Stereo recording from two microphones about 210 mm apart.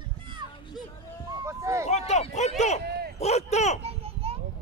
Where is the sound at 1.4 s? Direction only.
15° right (ahead or behind).